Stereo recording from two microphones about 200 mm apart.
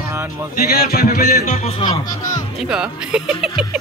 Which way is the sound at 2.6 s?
5° right (ahead or behind).